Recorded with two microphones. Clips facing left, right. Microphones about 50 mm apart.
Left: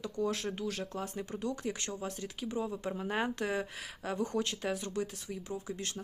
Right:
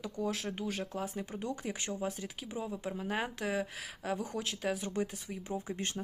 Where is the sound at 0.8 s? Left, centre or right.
Centre.